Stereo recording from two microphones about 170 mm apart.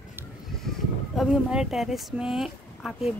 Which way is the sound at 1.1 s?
Centre (ahead or behind).